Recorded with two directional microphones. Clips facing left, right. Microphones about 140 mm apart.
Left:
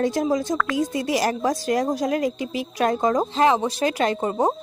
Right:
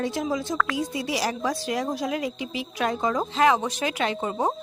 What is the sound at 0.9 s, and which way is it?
A woman's voice, 50° left (ahead or behind).